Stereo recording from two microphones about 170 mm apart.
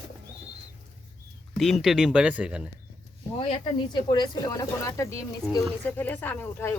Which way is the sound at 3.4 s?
30° left (ahead or behind).